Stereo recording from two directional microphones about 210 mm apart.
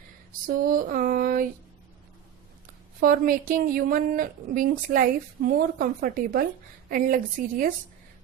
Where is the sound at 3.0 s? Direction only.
40° right (ahead or behind).